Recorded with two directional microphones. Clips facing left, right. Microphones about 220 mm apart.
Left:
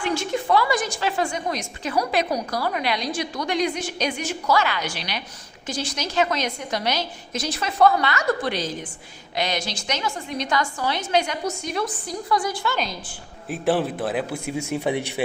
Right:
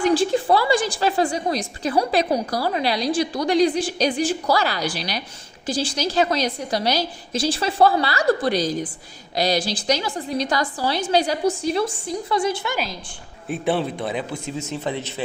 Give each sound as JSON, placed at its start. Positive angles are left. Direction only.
{"t": 0.0, "sound": "a woman's voice", "side_deg": -35}
{"t": 12.7, "sound": "a woman's voice", "side_deg": -5}